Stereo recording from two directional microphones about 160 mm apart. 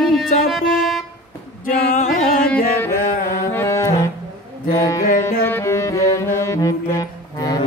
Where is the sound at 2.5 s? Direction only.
15° left (ahead or behind).